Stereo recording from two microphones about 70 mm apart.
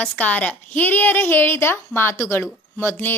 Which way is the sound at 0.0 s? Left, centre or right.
Left.